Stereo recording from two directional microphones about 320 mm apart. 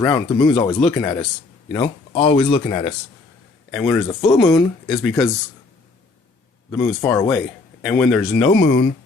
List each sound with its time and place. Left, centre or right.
0.0 s speech: centre
3.7 s speech: centre
6.8 s speech: centre
8.4 s speech: centre